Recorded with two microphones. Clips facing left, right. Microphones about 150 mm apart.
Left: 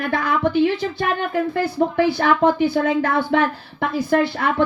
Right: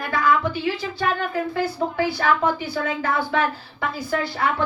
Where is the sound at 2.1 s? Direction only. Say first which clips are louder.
Left 4 dB; 60° left (ahead or behind).